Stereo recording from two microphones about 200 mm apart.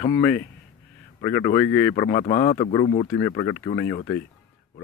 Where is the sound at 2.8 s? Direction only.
35° left (ahead or behind).